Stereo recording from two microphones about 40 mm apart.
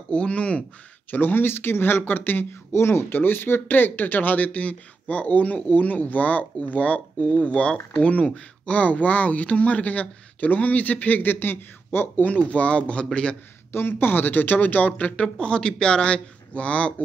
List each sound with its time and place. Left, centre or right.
0.1 s speech: left
1.1 s speech: left
12.3 s speech: left
13.7 s speech: left
15.2 s speech: left